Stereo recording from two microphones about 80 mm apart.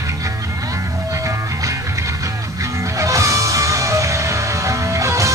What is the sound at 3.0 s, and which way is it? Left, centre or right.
Music, right.